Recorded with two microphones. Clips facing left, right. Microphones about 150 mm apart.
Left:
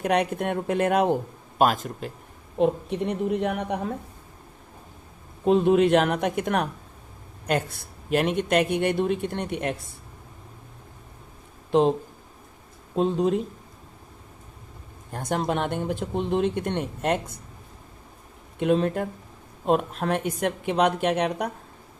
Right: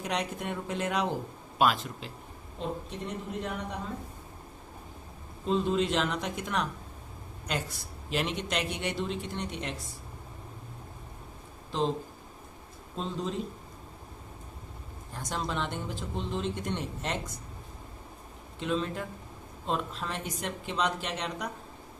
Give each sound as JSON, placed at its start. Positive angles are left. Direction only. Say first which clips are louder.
{"t": 0.0, "sound": "a man's voice", "louder": "left 9 dB", "side_deg": 60}
{"t": 2.6, "sound": "a man's voice", "louder": "left 13 dB", "side_deg": 65}
{"t": 5.5, "sound": "a man's voice", "louder": "left 9 dB", "side_deg": 60}
{"t": 11.7, "sound": "speech", "louder": "left 10 dB", "side_deg": 60}
{"t": 13.0, "sound": "a man's voice", "louder": "left 12 dB", "side_deg": 60}
{"t": 15.1, "sound": "a man's voice", "louder": "left 8 dB", "side_deg": 55}
{"t": 18.6, "sound": "a man's voice", "louder": "left 9 dB", "side_deg": 60}